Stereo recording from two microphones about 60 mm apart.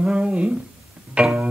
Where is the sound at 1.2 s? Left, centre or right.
Centre.